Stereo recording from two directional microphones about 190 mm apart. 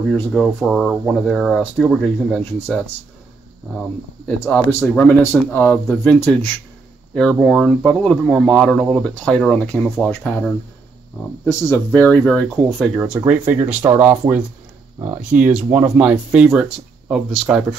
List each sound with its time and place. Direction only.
0.1 s speech: 5° left (ahead or behind)
4.5 s speech: 10° left (ahead or behind)